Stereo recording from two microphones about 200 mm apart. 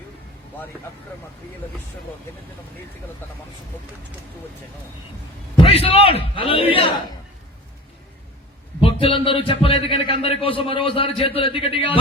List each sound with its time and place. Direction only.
5.6 s a man's voice: 30° left (ahead or behind)
8.8 s a man's voice: 25° left (ahead or behind)